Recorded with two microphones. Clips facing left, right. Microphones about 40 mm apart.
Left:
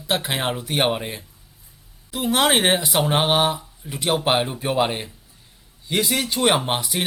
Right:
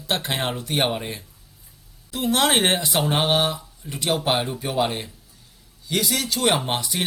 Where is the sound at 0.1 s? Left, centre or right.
Centre.